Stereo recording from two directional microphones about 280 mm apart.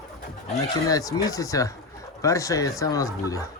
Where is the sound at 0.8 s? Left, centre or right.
Centre.